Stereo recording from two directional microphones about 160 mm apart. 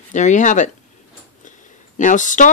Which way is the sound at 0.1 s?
50° left (ahead or behind).